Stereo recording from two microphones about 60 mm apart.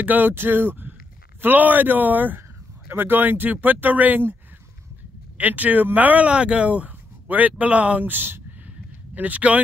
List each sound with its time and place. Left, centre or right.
0.0 s speech: right
5.4 s speech: right